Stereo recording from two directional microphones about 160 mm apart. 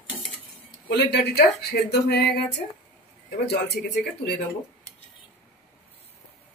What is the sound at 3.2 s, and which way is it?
Speech, 90° left.